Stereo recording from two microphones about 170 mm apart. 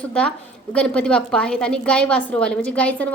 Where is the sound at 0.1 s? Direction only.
5° left (ahead or behind).